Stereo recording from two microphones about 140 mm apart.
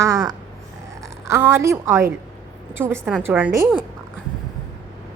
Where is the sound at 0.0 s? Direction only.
25° right (ahead or behind).